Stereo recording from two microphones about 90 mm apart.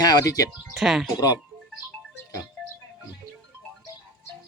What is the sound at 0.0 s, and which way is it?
Speech, 50° left (ahead or behind).